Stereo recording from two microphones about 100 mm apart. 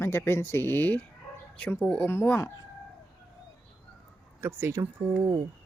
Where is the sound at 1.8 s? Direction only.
10° left (ahead or behind).